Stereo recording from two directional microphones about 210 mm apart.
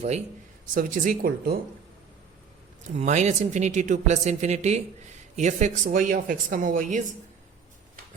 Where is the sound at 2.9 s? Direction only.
35° right (ahead or behind).